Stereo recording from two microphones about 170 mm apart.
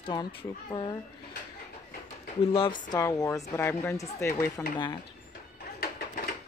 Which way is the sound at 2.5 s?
30° left (ahead or behind).